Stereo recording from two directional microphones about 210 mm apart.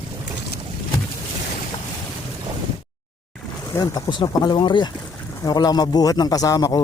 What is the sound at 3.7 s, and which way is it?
A man's voice, 20° left (ahead or behind).